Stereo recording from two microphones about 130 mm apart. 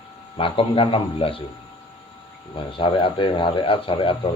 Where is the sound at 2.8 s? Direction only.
40° left (ahead or behind).